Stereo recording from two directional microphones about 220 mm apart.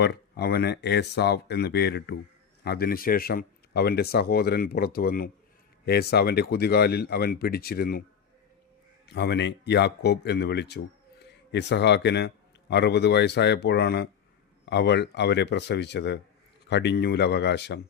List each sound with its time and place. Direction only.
0.0 s speech: 50° left (ahead or behind)
9.0 s speech: 50° left (ahead or behind)